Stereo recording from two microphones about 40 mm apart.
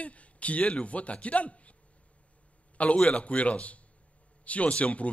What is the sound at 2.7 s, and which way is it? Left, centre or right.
Speech, left.